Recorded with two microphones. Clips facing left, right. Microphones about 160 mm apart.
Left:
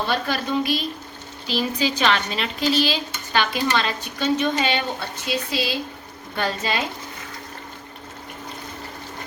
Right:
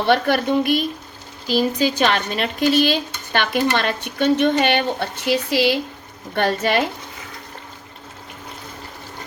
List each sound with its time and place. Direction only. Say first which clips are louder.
0.0 s speech: right 7 dB; 65° right (ahead or behind)